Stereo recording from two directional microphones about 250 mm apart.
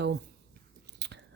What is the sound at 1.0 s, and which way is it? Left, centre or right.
Chewing, right.